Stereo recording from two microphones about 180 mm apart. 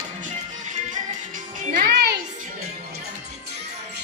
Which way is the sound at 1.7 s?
60° right (ahead or behind).